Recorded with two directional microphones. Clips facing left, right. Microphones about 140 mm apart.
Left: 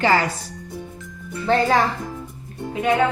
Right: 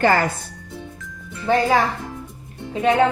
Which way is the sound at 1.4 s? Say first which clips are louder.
Right 1 dB; 10° right (ahead or behind).